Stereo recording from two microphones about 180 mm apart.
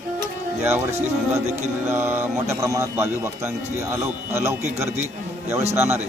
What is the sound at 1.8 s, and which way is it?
Speech, 15° right (ahead or behind).